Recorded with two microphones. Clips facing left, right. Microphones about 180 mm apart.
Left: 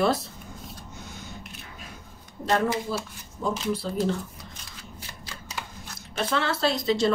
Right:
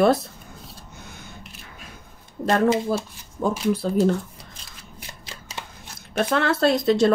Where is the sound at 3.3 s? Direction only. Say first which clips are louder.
Right 5 dB; 50° right (ahead or behind).